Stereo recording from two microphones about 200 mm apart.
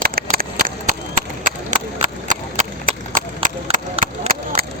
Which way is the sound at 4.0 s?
45° right (ahead or behind).